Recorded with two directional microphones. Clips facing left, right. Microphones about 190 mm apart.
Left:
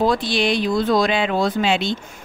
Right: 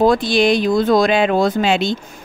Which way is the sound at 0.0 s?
45° right (ahead or behind).